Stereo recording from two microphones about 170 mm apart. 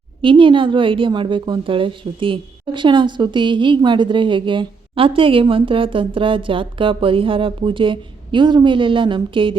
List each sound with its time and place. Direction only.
0.2 s a woman's voice: 30° right (ahead or behind)